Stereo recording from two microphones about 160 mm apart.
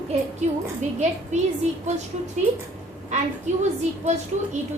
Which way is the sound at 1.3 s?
45° right (ahead or behind).